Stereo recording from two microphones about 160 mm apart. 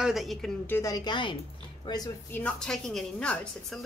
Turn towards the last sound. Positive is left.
turn(degrees=5)  # may be behind; listen again after turning